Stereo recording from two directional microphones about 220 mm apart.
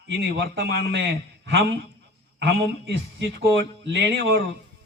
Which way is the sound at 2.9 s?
55° right (ahead or behind).